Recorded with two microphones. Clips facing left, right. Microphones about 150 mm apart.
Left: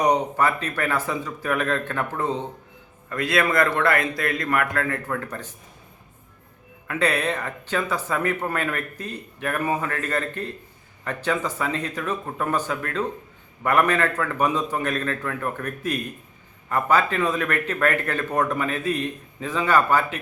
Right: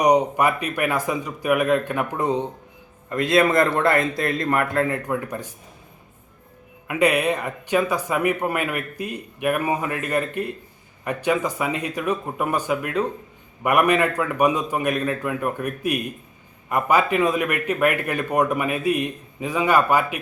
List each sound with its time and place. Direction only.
0.0 s a man's voice: 15° right (ahead or behind)
6.8 s speech: 15° right (ahead or behind)